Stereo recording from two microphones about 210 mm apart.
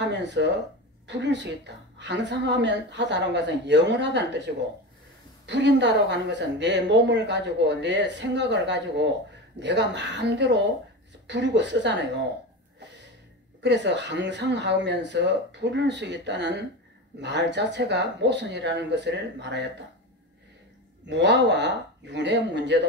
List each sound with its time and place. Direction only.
0.0 s a sound: 55° right (ahead or behind)
1.0 s speech: 55° right (ahead or behind)
5.5 s speech: 55° right (ahead or behind)
13.6 s speech: 55° right (ahead or behind)
21.0 s speech: 55° right (ahead or behind)